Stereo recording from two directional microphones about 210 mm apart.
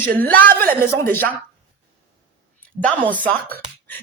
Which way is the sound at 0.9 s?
10° left (ahead or behind).